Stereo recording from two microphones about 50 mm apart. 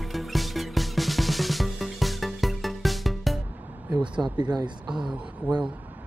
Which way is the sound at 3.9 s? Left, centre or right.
Right.